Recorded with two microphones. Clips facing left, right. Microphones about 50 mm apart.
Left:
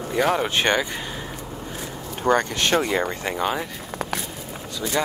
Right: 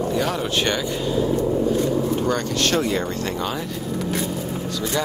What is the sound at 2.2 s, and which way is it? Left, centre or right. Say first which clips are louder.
Speech: left 1 dB; left.